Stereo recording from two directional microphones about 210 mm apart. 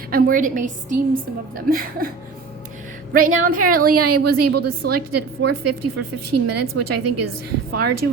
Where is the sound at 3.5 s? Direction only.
40° right (ahead or behind).